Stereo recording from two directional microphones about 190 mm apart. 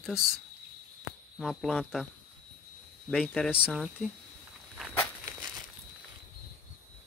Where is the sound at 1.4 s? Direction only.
Centre (ahead or behind).